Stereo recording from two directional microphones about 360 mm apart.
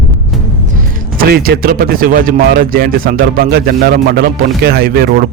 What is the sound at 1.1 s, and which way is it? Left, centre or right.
A man's voice, right.